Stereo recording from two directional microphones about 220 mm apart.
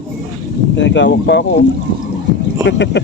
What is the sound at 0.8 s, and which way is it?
Speech, 55° left (ahead or behind).